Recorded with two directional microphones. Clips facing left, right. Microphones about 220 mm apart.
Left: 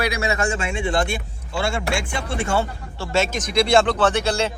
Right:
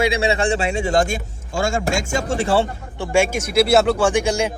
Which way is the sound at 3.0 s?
15° right (ahead or behind).